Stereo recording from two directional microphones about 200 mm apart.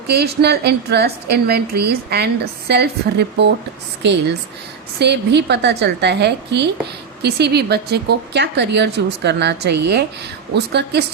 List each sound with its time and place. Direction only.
0.1 s a woman's voice: 55° right (ahead or behind)
4.9 s speech: 55° right (ahead or behind)